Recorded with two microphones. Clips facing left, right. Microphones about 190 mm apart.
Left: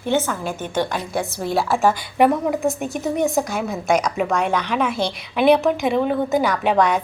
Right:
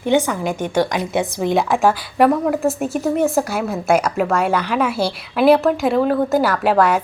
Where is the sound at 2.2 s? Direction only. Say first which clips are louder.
Right 2 dB; centre (ahead or behind).